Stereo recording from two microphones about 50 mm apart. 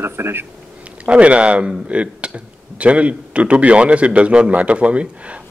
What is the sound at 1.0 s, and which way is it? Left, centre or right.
Speech, right.